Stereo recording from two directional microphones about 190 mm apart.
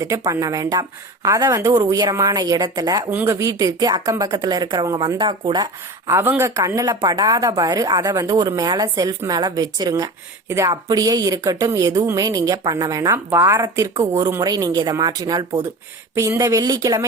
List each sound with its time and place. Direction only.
0.0 s speech: 15° right (ahead or behind)
6.1 s a woman's voice: 15° right (ahead or behind)